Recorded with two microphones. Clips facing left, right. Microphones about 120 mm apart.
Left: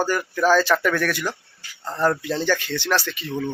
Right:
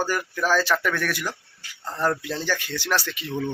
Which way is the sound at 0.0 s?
5° right (ahead or behind).